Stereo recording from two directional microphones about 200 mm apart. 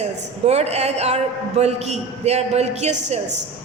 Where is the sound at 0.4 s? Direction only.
35° right (ahead or behind).